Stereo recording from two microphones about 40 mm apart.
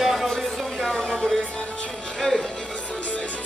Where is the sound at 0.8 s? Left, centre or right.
Centre.